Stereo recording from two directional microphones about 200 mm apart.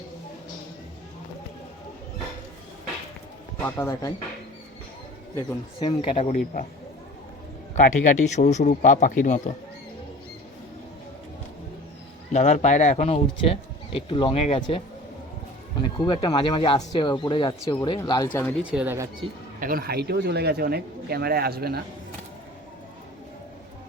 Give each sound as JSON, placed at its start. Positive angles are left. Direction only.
{"t": 3.6, "sound": "speech", "side_deg": 10}
{"t": 5.8, "sound": "speech", "side_deg": 25}
{"t": 6.4, "sound": "a man's voice", "side_deg": 45}
{"t": 7.8, "sound": "speech", "side_deg": 40}
{"t": 12.3, "sound": "speech", "side_deg": 35}
{"t": 15.8, "sound": "speech", "side_deg": 25}
{"t": 18.3, "sound": "speech", "side_deg": 10}
{"t": 18.7, "sound": "speech", "side_deg": -10}
{"t": 19.5, "sound": "speech", "side_deg": -45}